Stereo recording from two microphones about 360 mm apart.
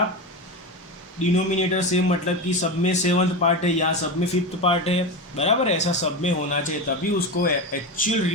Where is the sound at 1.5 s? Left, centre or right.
Centre.